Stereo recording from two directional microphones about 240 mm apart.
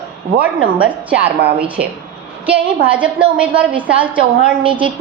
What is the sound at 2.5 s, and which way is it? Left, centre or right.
A woman's voice, centre.